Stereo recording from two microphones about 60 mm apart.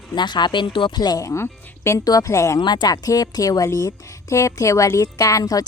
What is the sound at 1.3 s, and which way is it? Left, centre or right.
Speech, left.